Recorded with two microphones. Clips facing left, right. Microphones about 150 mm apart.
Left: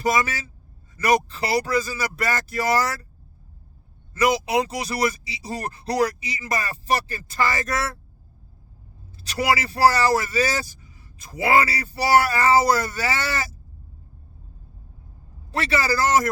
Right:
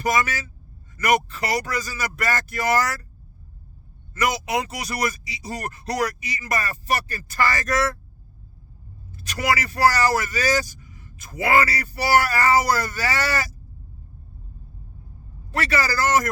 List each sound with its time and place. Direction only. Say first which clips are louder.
0.0 s speech: even; 25° left (ahead or behind)
4.1 s speech: left 3 dB; 30° left (ahead or behind)
9.1 s speech: left 1 dB; 30° left (ahead or behind)
15.5 s speech: left 1 dB; 25° left (ahead or behind)